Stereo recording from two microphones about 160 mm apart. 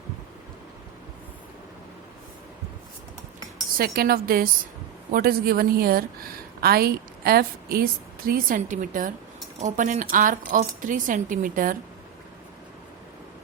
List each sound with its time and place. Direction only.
3.8 s a woman's voice: 70° right (ahead or behind)
8.3 s speech: 60° right (ahead or behind)